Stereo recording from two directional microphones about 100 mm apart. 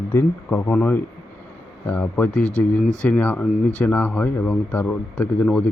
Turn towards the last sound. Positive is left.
turn(degrees=15)  # may be behind; listen again after turning